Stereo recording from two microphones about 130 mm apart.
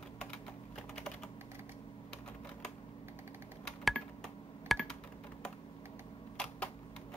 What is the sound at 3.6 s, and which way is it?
Computer keyboard, centre (ahead or behind).